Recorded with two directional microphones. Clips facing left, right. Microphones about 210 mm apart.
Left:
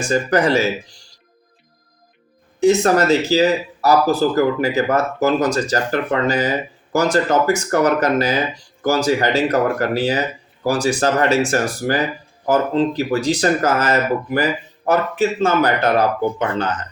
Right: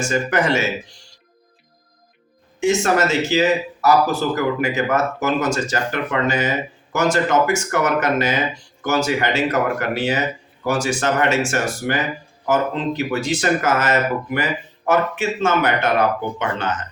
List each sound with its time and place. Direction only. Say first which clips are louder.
0.0 s speech: left 3 dB; 35° left (ahead or behind)
2.6 s speech: left 4 dB; 35° left (ahead or behind)